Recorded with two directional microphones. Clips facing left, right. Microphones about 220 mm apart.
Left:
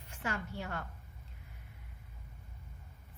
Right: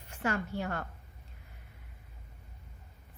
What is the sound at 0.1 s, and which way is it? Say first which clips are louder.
Speech: right 6 dB; 55° right (ahead or behind).